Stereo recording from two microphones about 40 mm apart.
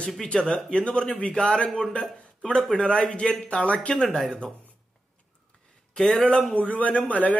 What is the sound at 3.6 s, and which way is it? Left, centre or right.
Speech, left.